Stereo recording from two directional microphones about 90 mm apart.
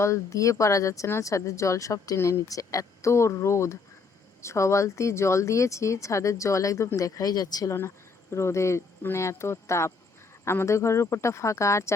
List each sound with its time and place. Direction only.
0.0 s speech: 35° left (ahead or behind)
7.7 s speech: 30° left (ahead or behind)